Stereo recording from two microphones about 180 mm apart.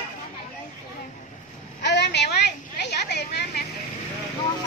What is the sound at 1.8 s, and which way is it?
A woman's voice, 70° left (ahead or behind).